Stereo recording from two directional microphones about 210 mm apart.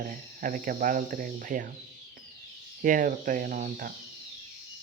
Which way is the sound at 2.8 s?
40° right (ahead or behind).